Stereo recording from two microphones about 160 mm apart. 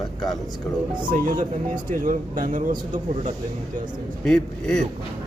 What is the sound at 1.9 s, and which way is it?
Speech, 55° right (ahead or behind).